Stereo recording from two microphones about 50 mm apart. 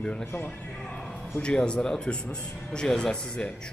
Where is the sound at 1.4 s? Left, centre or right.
Centre.